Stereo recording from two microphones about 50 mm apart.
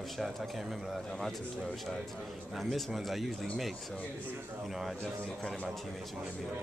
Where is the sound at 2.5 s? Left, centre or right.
Centre.